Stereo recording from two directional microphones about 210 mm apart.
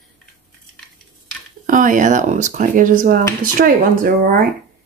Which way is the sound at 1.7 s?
40° right (ahead or behind).